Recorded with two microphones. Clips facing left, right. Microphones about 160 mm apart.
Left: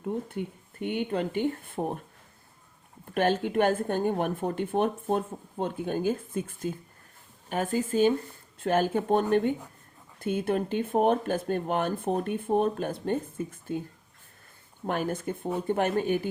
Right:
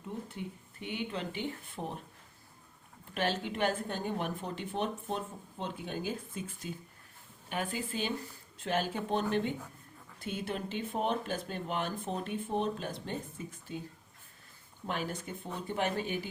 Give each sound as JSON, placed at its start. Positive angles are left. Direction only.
{"t": 0.0, "sound": "speech", "side_deg": 55}
{"t": 3.2, "sound": "speech", "side_deg": 50}
{"t": 14.8, "sound": "speech", "side_deg": 50}